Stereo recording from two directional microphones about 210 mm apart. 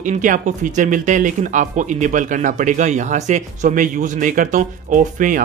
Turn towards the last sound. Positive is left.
turn(degrees=-40)  # may be behind; listen again after turning